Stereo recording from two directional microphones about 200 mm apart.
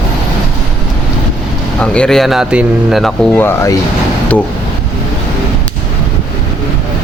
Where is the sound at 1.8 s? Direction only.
5° left (ahead or behind).